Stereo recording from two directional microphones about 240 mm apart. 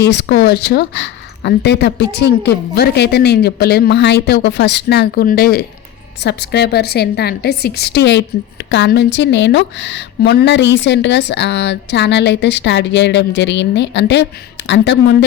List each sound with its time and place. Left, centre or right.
0.0 s a woman's voice: left